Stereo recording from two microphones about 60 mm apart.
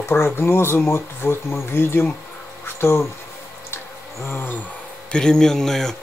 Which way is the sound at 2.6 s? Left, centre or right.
Left.